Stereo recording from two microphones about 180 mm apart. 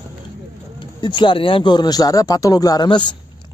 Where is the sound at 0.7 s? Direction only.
25° left (ahead or behind).